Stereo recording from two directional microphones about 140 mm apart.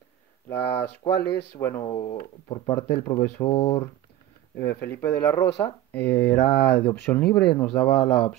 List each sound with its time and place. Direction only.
0.5 s speech: 20° left (ahead or behind)
1.9 s speech: 30° left (ahead or behind); by 8.4 s 10° left (ahead or behind)